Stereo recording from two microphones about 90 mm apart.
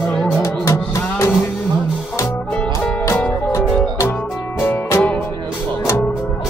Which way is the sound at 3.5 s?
30° left (ahead or behind).